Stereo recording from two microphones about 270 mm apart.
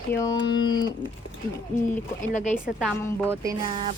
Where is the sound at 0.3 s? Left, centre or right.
Left.